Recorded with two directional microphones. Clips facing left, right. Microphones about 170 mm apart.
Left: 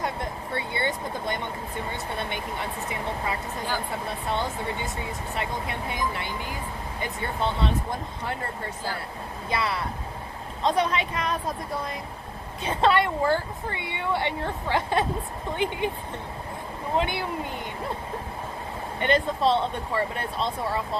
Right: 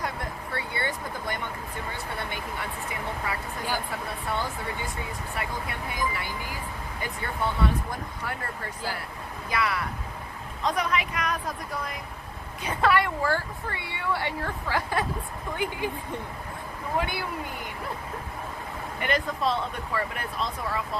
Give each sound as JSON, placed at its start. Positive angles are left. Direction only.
{"t": 0.0, "sound": "vehicle", "side_deg": 25}
{"t": 1.9, "sound": "a woman's voice", "side_deg": 25}
{"t": 16.9, "sound": "speech", "side_deg": 25}
{"t": 18.9, "sound": "a woman's voice", "side_deg": 30}